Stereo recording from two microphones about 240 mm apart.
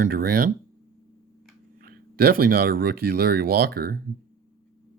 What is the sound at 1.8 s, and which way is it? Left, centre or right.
Speech, right.